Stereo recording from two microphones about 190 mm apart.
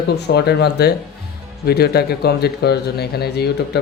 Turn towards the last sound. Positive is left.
turn(degrees=60)  # may be behind; listen again after turning